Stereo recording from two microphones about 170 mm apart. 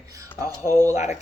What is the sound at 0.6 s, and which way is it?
Speech, 15° left (ahead or behind).